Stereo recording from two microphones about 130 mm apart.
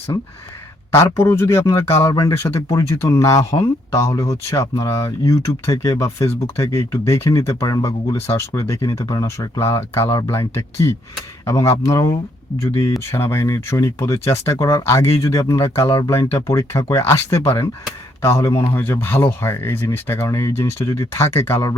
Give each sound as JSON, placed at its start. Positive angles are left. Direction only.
{"t": 0.9, "sound": "speech", "side_deg": 20}